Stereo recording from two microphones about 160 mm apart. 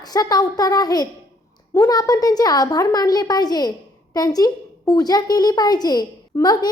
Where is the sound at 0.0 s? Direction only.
25° left (ahead or behind).